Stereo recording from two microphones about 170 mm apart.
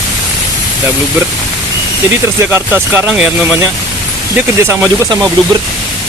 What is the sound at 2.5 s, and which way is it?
Speech, 15° right (ahead or behind).